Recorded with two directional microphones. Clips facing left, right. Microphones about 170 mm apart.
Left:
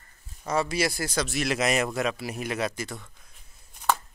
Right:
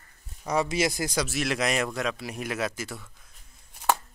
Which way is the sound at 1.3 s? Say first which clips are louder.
Left 2 dB; centre (ahead or behind).